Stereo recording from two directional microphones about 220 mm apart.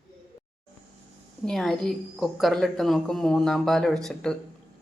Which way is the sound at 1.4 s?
Centre (ahead or behind).